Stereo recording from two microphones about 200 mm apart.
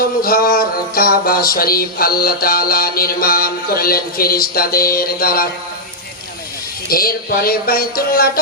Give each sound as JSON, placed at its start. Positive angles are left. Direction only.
{"t": 0.0, "sound": "music", "side_deg": 45}
{"t": 6.8, "sound": "music", "side_deg": 45}